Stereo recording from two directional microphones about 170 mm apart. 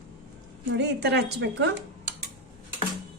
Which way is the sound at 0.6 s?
85° right.